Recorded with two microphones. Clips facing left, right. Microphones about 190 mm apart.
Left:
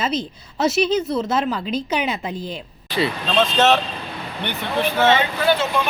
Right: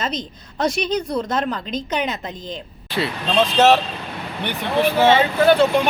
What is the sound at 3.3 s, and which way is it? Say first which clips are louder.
Speech: right 3 dB; 10° right (ahead or behind).